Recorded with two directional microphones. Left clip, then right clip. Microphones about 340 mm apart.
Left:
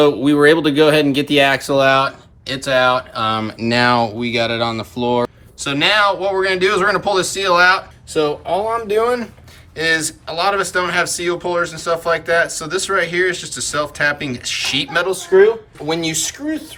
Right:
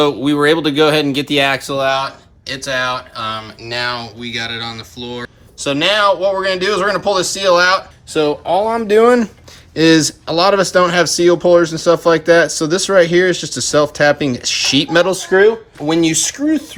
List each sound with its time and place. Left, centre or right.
0.0 s speech: centre
3.4 s speech: left
5.5 s speech: centre
8.1 s speech: right
15.3 s speech: right